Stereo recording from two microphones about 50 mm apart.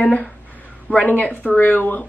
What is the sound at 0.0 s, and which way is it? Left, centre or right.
Speech, left.